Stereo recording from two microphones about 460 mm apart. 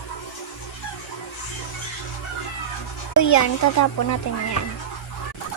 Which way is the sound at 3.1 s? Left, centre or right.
Left.